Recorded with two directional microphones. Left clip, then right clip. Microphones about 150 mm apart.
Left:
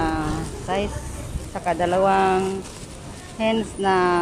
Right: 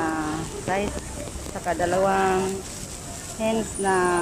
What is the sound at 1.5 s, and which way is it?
Speech, 25° left (ahead or behind).